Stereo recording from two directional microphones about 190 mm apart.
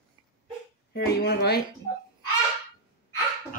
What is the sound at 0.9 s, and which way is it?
Speech, 60° left (ahead or behind).